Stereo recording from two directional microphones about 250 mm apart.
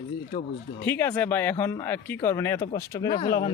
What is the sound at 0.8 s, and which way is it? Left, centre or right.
Speech, centre.